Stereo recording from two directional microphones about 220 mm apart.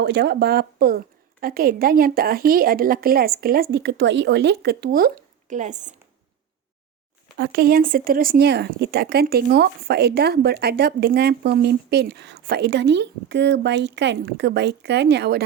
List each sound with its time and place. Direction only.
0.0 s speech: 50° right (ahead or behind); by 5.9 s 35° right (ahead or behind)
7.3 s speech: 45° right (ahead or behind)